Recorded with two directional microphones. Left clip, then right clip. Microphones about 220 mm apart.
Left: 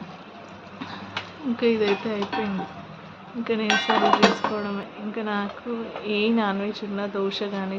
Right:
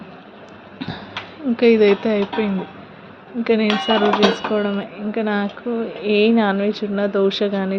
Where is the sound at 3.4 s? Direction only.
25° right (ahead or behind).